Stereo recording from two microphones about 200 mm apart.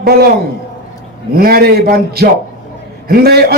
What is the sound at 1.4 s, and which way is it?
A man's voice, 50° right (ahead or behind).